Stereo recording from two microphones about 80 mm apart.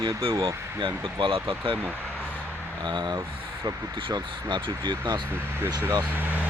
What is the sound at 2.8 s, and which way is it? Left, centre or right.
Speech, right.